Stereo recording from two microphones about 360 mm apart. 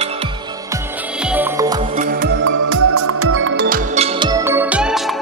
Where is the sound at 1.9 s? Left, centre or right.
Right.